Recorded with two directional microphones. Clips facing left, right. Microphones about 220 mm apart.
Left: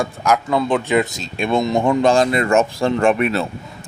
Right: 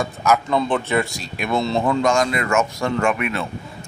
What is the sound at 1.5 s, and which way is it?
Speech, 15° left (ahead or behind).